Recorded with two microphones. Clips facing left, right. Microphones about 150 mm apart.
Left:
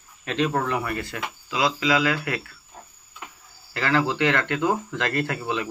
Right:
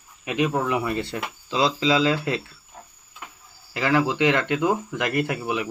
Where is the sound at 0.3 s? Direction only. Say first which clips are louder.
Right 1 dB; 15° right (ahead or behind).